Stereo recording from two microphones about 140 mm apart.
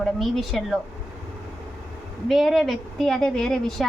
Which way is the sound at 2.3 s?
Centre (ahead or behind).